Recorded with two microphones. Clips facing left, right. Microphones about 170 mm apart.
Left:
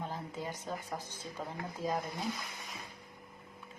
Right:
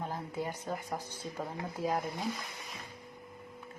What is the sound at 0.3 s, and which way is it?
Speech, 15° right (ahead or behind).